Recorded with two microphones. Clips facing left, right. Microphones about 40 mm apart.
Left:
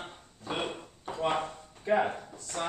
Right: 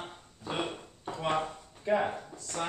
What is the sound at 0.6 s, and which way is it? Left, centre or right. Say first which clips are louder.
Drawer open or close: right 1 dB; centre.